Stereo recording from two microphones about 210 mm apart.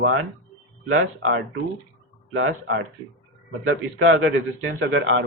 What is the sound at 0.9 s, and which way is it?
Speech, 75° right (ahead or behind).